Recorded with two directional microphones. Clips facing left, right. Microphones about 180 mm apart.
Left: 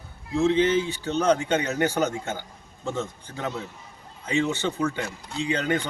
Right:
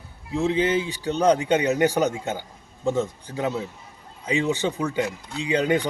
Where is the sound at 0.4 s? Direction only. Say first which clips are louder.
Left 1 dB; 15° right (ahead or behind).